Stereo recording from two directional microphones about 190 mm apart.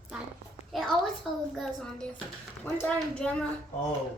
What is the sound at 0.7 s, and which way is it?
A woman's voice, centre (ahead or behind).